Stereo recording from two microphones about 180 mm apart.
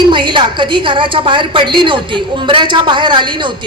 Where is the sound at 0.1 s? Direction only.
25° right (ahead or behind).